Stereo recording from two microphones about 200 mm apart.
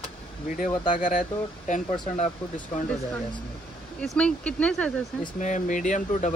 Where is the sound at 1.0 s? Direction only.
40° left (ahead or behind).